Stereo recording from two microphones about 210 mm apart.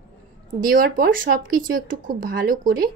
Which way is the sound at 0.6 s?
45° right (ahead or behind).